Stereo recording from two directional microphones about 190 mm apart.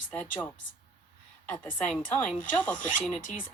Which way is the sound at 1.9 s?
5° left (ahead or behind).